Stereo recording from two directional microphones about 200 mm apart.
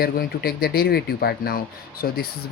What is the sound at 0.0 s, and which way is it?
Speech, 50° left (ahead or behind).